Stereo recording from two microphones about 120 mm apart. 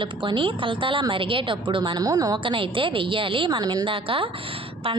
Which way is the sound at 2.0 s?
30° right (ahead or behind).